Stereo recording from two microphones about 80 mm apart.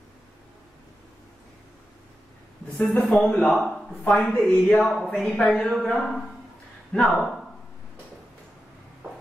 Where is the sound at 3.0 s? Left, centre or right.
Centre.